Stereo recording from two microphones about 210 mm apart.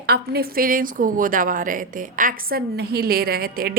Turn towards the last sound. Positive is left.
turn(degrees=-45)  # may be behind; listen again after turning